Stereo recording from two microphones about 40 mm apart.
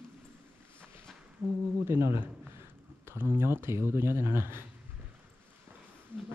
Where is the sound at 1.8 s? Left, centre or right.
Right.